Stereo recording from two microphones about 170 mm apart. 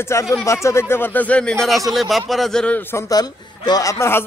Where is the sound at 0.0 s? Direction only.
15° left (ahead or behind).